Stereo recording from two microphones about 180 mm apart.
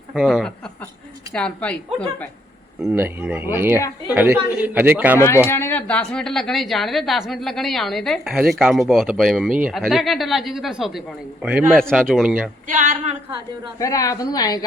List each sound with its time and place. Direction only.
0.1 s speech: centre (ahead or behind)
2.8 s a man's voice: 10° right (ahead or behind)
3.8 s a woman's voice: 20° left (ahead or behind)
4.1 s a man's voice: 10° right (ahead or behind)
5.5 s speech: 15° left (ahead or behind); by 12.5 s 5° right (ahead or behind)
12.6 s a sound: 45° right (ahead or behind)
13.7 s a woman's voice: 20° left (ahead or behind)